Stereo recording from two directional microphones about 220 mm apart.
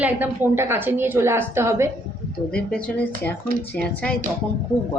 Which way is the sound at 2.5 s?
5° left (ahead or behind).